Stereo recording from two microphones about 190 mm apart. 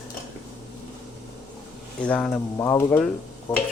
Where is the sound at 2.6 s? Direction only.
15° left (ahead or behind).